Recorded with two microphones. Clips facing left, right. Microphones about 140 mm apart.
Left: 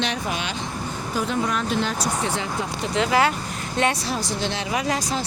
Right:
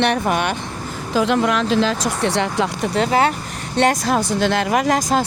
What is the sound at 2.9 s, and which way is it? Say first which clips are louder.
Speech: right 2 dB; 45° right (ahead or behind).